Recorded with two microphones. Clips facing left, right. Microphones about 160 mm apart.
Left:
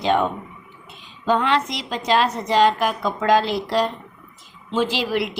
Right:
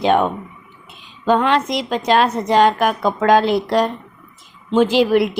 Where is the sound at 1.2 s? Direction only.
50° right (ahead or behind).